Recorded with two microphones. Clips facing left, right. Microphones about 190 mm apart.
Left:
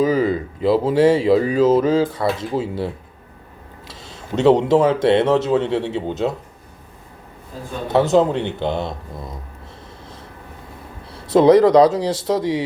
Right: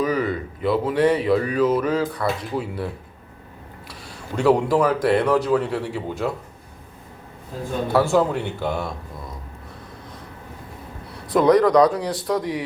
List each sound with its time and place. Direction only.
0.0 s speech: 25° left (ahead or behind)
7.9 s speech: 20° left (ahead or behind)
11.3 s speech: 25° left (ahead or behind)